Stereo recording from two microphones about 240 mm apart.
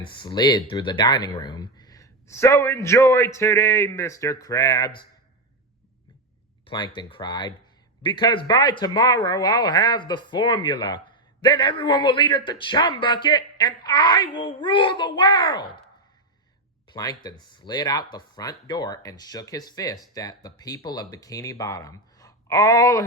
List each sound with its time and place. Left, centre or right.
0.0 s speech: centre
6.7 s speech: centre
16.9 s speech: centre